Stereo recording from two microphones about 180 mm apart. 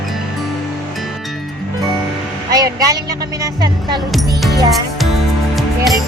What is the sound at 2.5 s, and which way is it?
Vehicle, 20° right (ahead or behind).